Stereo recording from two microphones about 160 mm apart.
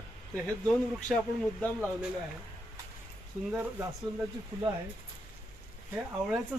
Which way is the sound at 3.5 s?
15° right (ahead or behind).